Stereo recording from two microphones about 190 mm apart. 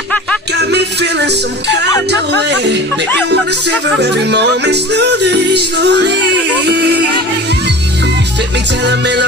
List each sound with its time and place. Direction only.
0.6 s music: 60° right (ahead or behind)
2.0 s speech: 65° right (ahead or behind)
8.8 s speech: 65° right (ahead or behind)